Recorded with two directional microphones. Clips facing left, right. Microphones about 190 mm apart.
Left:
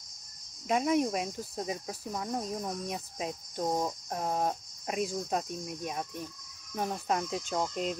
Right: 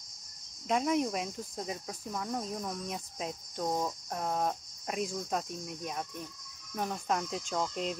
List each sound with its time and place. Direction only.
0.7 s speech: 5° left (ahead or behind)
2.1 s speech: 15° left (ahead or behind)
2.9 s speech: 5° left (ahead or behind)
3.6 s speech: 15° left (ahead or behind)
4.3 s speech: 30° left (ahead or behind)
4.8 s speech: 5° left (ahead or behind)